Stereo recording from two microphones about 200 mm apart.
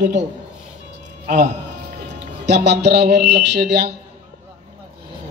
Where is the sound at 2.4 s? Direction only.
60° right (ahead or behind).